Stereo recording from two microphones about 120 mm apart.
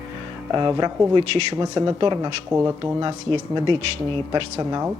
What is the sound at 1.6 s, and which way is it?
Speech, 35° right (ahead or behind).